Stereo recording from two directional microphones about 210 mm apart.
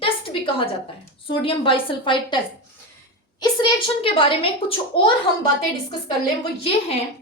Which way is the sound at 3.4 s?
20° left (ahead or behind).